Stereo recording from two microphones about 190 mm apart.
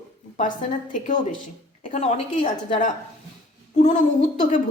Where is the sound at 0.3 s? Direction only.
40° left (ahead or behind).